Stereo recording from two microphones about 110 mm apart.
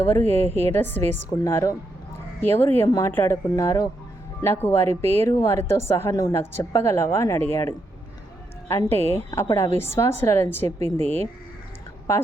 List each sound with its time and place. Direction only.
0.0 s a woman's voice: 20° left (ahead or behind)